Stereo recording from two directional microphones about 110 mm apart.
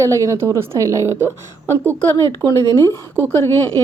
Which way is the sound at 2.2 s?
30° left (ahead or behind).